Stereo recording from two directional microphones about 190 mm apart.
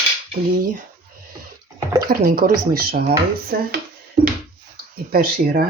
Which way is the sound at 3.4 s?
50° right (ahead or behind).